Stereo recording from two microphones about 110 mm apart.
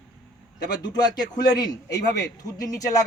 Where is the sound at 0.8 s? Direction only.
40° left (ahead or behind).